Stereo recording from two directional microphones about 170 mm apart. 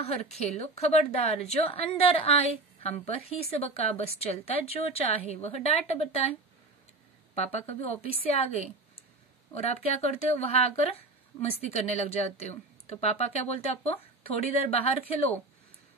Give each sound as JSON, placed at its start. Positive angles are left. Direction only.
{"t": 0.0, "sound": "a woman's voice", "side_deg": 40}
{"t": 7.3, "sound": "a woman's voice", "side_deg": 40}